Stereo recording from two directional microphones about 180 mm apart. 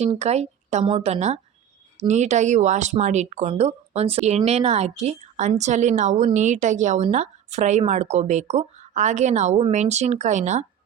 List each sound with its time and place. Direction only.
0.0 s a woman's voice: 35° right (ahead or behind)